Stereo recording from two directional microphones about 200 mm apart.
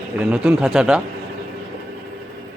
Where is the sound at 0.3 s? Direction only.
10° right (ahead or behind).